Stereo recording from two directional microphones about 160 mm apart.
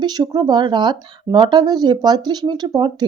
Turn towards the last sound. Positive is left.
turn(degrees=-25)  # may be behind; listen again after turning